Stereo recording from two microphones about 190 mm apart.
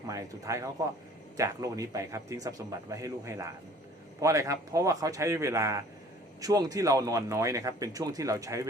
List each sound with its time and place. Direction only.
0.1 s speech: 15° right (ahead or behind)